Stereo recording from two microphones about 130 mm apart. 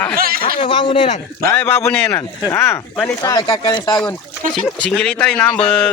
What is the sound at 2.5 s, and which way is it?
Speech, 20° left (ahead or behind).